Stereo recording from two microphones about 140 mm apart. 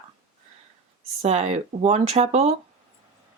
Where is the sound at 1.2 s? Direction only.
50° right (ahead or behind).